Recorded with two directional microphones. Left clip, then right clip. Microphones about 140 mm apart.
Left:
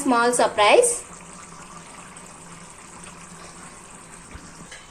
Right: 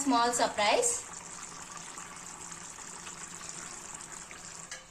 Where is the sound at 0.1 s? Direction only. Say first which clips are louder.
Left 8 dB; 35° left (ahead or behind).